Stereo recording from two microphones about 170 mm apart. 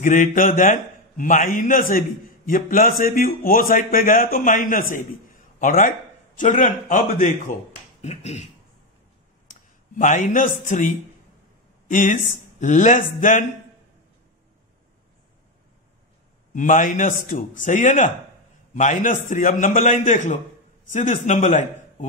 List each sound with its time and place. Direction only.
0.0 s a man's voice: 50° left (ahead or behind)
8.0 s finger snapping: 40° left (ahead or behind)
9.5 s a man's voice: 50° left (ahead or behind)
11.9 s a man's voice: 50° left (ahead or behind)
16.5 s a man's voice: 50° left (ahead or behind)